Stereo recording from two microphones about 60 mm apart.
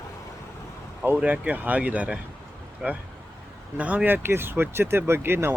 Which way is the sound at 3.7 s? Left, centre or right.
Right.